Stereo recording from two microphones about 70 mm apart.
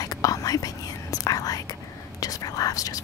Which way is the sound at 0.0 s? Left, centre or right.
Left.